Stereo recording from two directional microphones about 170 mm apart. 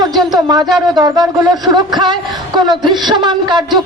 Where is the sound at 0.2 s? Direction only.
25° right (ahead or behind).